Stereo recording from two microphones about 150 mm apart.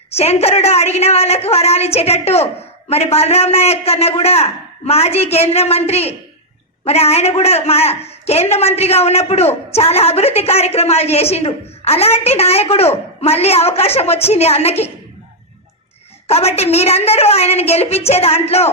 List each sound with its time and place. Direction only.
0.1 s a man's voice: 45° left (ahead or behind)
16.2 s a man's voice: 45° left (ahead or behind)